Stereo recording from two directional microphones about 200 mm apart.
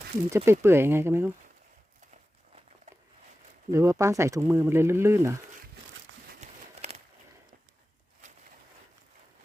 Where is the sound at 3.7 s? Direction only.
15° right (ahead or behind).